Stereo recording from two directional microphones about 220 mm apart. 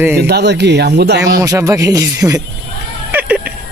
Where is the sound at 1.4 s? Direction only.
15° right (ahead or behind).